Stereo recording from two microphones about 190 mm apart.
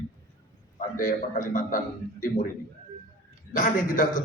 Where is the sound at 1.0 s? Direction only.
45° left (ahead or behind).